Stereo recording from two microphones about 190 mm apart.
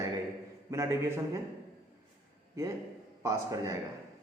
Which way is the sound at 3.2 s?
15° right (ahead or behind).